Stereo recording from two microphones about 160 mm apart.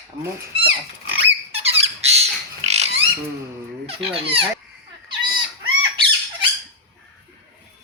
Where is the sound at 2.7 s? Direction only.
40° right (ahead or behind).